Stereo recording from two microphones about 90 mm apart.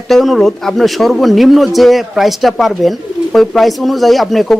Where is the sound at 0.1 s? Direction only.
Centre (ahead or behind).